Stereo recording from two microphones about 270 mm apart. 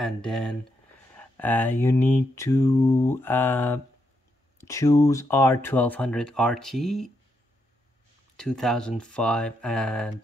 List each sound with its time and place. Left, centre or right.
0.0 s speech: centre
1.1 s mantra: centre
8.4 s speech: centre